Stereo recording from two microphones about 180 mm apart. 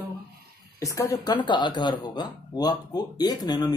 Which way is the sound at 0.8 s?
15° left (ahead or behind).